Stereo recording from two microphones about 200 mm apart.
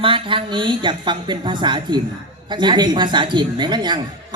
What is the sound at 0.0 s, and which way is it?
A man's voice, 25° right (ahead or behind).